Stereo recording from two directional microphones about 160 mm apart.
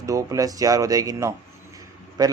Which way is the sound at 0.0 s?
20° right (ahead or behind).